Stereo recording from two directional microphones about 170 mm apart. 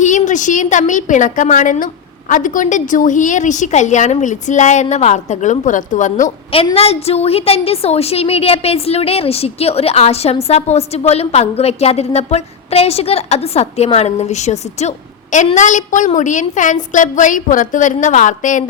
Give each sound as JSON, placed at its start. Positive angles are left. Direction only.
{"t": 0.0, "sound": "a woman's voice", "side_deg": 45}
{"t": 6.7, "sound": "a woman's voice", "side_deg": 35}